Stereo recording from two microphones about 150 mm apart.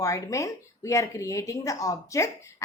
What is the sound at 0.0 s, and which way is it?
Speech, 20° left (ahead or behind).